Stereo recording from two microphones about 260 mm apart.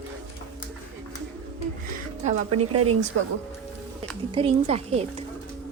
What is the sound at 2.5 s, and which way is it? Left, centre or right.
Speech, right.